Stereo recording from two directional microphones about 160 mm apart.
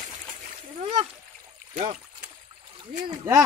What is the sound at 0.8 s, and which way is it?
Splash, 45° right (ahead or behind).